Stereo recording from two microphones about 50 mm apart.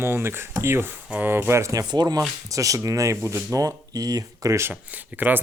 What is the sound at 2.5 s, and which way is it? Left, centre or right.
Speech, right.